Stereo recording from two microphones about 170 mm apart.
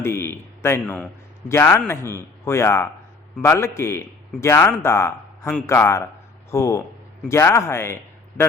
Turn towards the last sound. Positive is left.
turn(degrees=15)  # may be behind; listen again after turning